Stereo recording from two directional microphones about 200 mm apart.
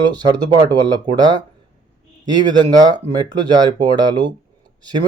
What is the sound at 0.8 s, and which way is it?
Speech, 20° right (ahead or behind).